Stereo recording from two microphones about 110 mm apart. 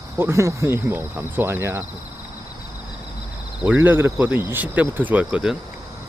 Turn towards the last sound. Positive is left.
turn(degrees=-10)  # may be behind; listen again after turning